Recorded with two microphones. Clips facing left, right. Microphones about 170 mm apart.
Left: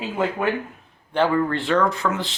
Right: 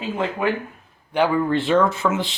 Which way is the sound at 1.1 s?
10° right (ahead or behind).